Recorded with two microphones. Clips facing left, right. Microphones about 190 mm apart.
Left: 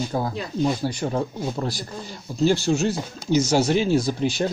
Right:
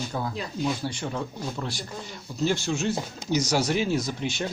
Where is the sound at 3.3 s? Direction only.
25° left (ahead or behind).